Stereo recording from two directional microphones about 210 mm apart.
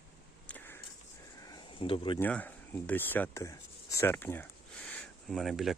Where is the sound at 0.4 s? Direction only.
10° left (ahead or behind).